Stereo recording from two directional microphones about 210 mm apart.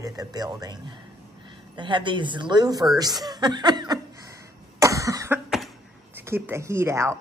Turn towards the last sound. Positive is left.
turn(degrees=-15)  # may be behind; listen again after turning